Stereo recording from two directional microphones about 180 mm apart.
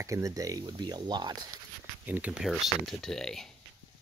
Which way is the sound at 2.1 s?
10° right (ahead or behind).